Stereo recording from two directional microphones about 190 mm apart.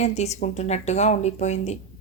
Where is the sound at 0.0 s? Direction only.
35° left (ahead or behind).